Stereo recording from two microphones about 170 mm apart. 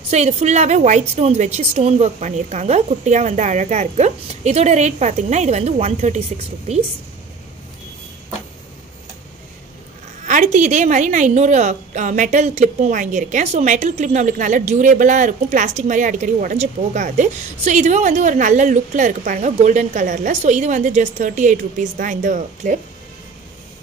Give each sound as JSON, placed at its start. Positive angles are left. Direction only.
{"t": 0.1, "sound": "a woman's voice", "side_deg": -40}
{"t": 10.2, "sound": "a woman's voice", "side_deg": -45}